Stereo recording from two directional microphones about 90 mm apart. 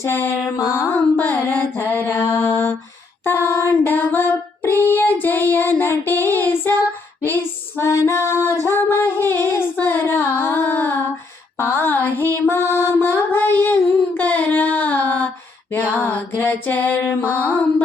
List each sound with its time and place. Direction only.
0.0 s mantra: 30° left (ahead or behind)
3.2 s a sound: 30° left (ahead or behind)
4.6 s child singing: 25° left (ahead or behind)
7.3 s female singing: 25° left (ahead or behind)
11.5 s music: 25° left (ahead or behind)
15.7 s a sound: 20° left (ahead or behind)
17.2 s mantra: 20° left (ahead or behind)